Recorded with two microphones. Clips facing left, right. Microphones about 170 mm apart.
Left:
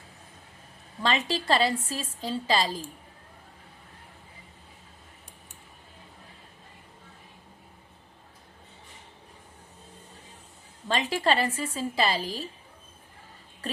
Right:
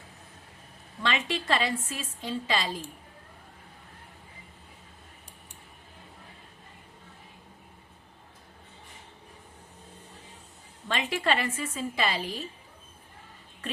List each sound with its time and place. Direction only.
1.0 s a woman's voice: 35° left (ahead or behind)
10.8 s a woman's voice: 35° left (ahead or behind)